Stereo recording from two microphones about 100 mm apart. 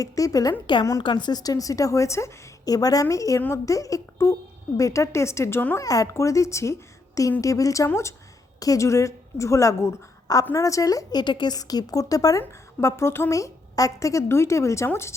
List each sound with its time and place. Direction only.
0.0 s a woman's voice: 35° left (ahead or behind)
1.0 s a woman's voice: 50° left (ahead or behind); by 5.8 s 25° left (ahead or behind)
5.8 s a woman's voice: 35° left (ahead or behind)
12.4 s a woman's voice: 25° left (ahead or behind)